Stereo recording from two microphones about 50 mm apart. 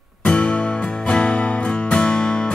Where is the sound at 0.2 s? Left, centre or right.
Centre.